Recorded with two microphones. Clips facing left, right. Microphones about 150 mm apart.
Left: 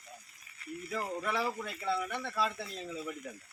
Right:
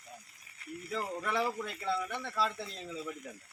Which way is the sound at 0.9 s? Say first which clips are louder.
Even; 5° left (ahead or behind).